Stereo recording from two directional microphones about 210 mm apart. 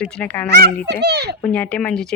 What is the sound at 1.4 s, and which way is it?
Speech, 5° left (ahead or behind).